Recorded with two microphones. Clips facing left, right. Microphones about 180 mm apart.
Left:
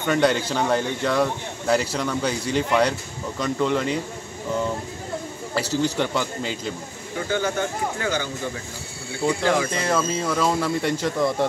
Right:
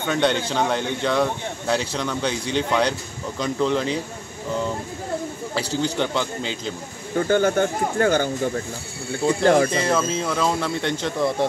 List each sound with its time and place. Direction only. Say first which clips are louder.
0.1 s a man's voice: left 1 dB; 5° left (ahead or behind)
5.6 s a man's voice: left 2 dB; 30° right (ahead or behind)
5.9 s a man's voice: right 1 dB; 5° left (ahead or behind)
7.2 s speech: right 6 dB; 50° right (ahead or behind)
9.4 s speech: right 7 dB; 40° right (ahead or behind)
9.7 s a man's voice: right 2 dB; centre (ahead or behind)